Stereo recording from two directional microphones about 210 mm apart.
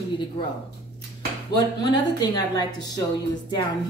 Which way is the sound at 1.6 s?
20° left (ahead or behind).